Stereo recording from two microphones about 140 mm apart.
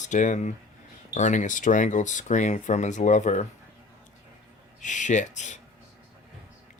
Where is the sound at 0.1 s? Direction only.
60° left (ahead or behind).